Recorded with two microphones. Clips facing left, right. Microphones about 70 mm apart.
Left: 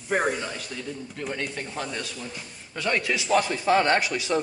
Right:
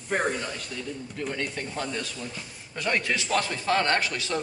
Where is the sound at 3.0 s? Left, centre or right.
Centre.